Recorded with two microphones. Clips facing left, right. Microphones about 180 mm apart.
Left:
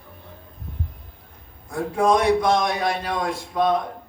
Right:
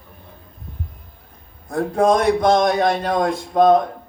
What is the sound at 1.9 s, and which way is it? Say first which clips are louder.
Speech: right 2 dB; 40° right (ahead or behind).